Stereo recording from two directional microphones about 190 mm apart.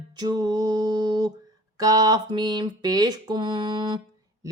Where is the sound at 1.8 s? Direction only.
20° right (ahead or behind).